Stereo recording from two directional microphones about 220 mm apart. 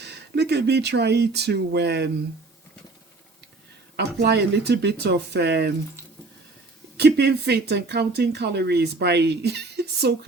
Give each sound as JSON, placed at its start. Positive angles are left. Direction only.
{"t": 0.0, "sound": "speech", "side_deg": -50}
{"t": 3.9, "sound": "speech", "side_deg": -50}
{"t": 6.9, "sound": "speech", "side_deg": -50}